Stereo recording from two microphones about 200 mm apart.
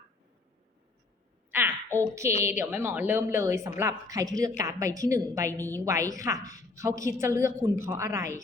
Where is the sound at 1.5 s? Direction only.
10° right (ahead or behind).